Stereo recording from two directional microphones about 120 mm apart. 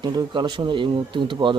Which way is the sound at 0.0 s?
35° right (ahead or behind).